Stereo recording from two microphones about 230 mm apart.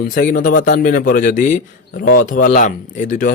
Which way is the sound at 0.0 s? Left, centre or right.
Left.